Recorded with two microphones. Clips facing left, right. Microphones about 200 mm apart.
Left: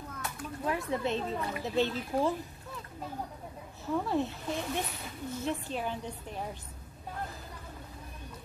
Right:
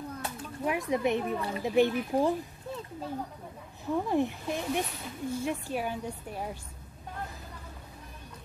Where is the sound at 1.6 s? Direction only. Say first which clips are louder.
Right 6 dB; 15° right (ahead or behind).